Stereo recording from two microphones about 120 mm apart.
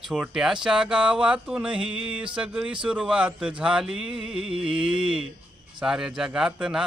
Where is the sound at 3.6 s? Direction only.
10° right (ahead or behind).